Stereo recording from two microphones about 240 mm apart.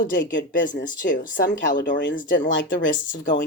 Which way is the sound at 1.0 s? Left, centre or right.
Left.